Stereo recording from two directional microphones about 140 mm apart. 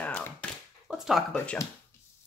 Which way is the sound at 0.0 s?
10° left (ahead or behind).